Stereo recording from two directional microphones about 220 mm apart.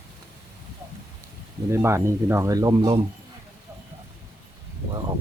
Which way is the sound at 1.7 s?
10° right (ahead or behind).